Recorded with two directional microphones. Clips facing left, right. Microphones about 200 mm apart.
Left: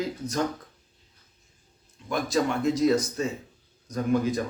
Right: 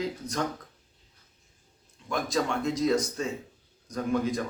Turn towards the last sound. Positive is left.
turn(degrees=0)  # may be behind; listen again after turning